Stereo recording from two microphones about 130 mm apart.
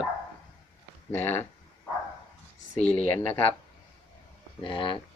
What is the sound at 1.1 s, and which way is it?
Speech, 15° left (ahead or behind).